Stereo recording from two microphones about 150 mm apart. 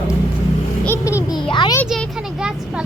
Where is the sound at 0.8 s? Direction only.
15° left (ahead or behind).